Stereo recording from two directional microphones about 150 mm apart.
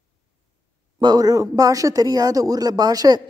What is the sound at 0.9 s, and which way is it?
Speech, 25° right (ahead or behind).